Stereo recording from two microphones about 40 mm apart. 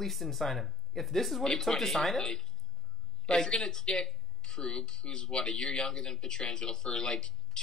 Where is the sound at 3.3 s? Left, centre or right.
Centre.